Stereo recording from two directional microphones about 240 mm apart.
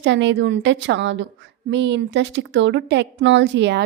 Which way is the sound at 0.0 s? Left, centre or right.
Right.